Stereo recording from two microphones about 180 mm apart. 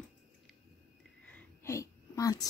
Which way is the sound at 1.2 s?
10° left (ahead or behind).